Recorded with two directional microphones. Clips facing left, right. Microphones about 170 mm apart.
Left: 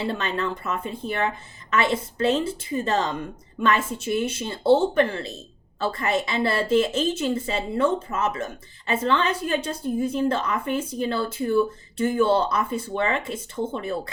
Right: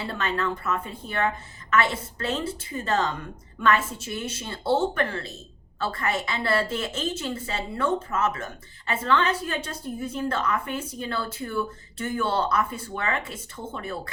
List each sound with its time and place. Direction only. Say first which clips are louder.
0.0 s a woman's voice: left 2 dB; 20° left (ahead or behind)